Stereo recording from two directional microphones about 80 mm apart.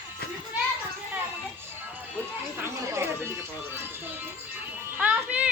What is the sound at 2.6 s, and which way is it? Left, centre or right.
Music, right.